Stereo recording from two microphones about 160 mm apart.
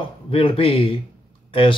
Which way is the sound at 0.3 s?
35° left (ahead or behind).